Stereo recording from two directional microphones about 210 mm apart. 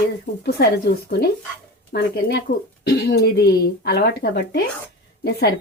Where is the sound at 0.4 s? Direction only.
50° left (ahead or behind).